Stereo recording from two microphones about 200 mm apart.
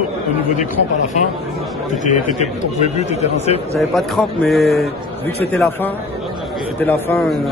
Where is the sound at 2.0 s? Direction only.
35° left (ahead or behind).